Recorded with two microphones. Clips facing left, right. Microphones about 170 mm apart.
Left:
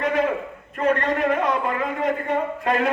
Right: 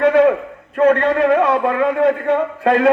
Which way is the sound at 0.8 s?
70° right (ahead or behind).